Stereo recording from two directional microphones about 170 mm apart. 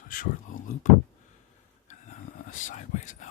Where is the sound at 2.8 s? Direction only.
45° left (ahead or behind).